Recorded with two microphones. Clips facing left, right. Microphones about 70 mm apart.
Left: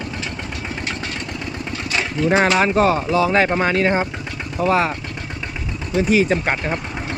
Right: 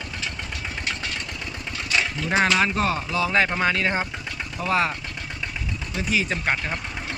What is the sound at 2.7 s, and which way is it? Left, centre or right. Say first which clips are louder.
Speech: left 8 dB; centre.